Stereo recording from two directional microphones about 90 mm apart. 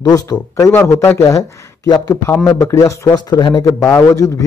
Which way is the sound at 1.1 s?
40° left (ahead or behind).